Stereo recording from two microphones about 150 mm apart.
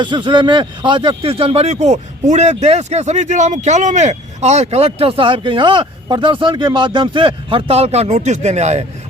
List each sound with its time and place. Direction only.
0.0 s a man's voice: 30° right (ahead or behind); by 8.8 s 50° right (ahead or behind)